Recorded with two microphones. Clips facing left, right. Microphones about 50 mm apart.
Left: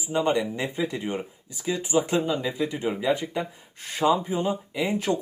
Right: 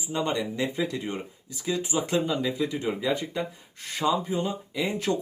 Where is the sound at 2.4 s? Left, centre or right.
Centre.